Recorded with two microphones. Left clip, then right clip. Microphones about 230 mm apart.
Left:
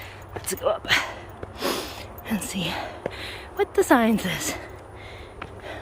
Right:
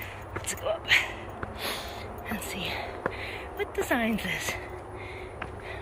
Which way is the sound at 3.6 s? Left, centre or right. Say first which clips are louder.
Left 9 dB; left.